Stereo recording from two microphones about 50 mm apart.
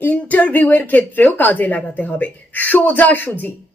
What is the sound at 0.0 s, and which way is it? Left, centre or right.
A woman's voice, left.